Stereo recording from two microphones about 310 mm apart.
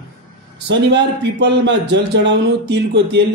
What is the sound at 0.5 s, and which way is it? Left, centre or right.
A man's voice, right.